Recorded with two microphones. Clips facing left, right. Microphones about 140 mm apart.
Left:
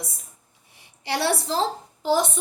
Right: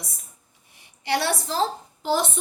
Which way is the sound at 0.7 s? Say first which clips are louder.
Right 2 dB; 30° left (ahead or behind).